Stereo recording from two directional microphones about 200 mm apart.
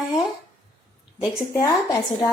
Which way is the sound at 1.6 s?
20° left (ahead or behind).